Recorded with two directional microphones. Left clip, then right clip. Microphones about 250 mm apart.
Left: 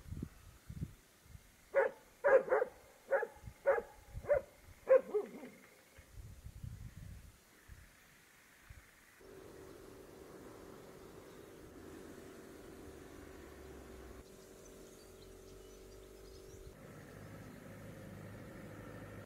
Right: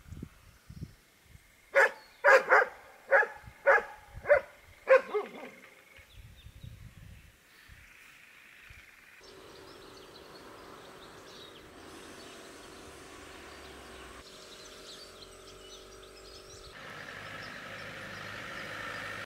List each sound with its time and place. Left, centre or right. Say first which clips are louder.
1.7 s dog: right 9 dB; centre
9.7 s a sound: right 5 dB; centre
16.4 s vehicle: right 9 dB; centre